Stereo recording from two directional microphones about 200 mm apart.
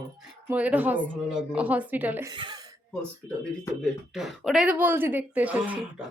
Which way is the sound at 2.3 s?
25° right (ahead or behind).